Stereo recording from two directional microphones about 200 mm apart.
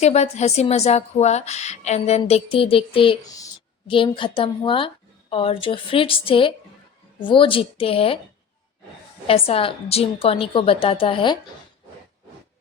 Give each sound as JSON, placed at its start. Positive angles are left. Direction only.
{"t": 0.0, "sound": "a woman's voice", "side_deg": 35}
{"t": 9.2, "sound": "a woman's voice", "side_deg": 30}